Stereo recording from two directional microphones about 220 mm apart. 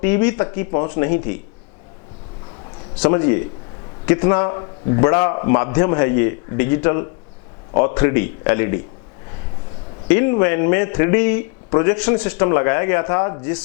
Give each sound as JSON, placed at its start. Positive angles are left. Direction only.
{"t": 0.0, "sound": "speech", "side_deg": 10}
{"t": 3.0, "sound": "speech", "side_deg": 15}
{"t": 10.1, "sound": "speech", "side_deg": 15}